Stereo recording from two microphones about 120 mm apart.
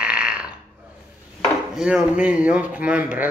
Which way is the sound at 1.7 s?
5° right (ahead or behind).